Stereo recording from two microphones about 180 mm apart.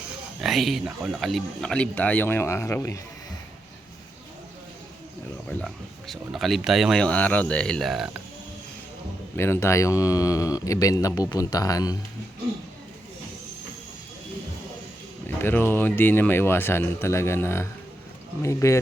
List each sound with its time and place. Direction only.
0.4 s speech: centre (ahead or behind); by 3.0 s 15° left (ahead or behind)
5.5 s speech: 5° left (ahead or behind)
9.3 s speech: 15° left (ahead or behind)
15.4 s speech: 10° left (ahead or behind)